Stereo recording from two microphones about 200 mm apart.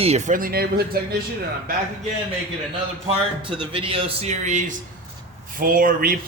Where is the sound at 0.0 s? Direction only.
35° right (ahead or behind); by 0.9 s 50° right (ahead or behind).